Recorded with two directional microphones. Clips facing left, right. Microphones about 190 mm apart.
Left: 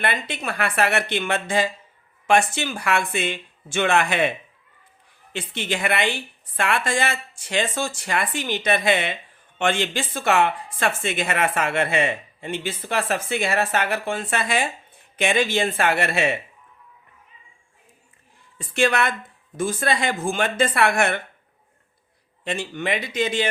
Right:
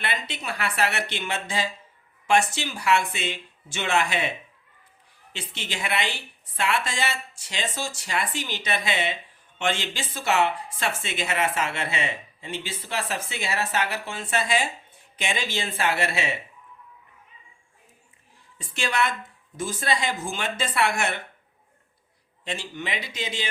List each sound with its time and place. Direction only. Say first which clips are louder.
0.0 s a woman's voice: left 5 dB; 55° left (ahead or behind)
5.3 s a woman's voice: left 8 dB; 55° left (ahead or behind)
18.5 s a woman's voice: left 7 dB; 55° left (ahead or behind)
22.4 s a woman's voice: left 6 dB; 55° left (ahead or behind)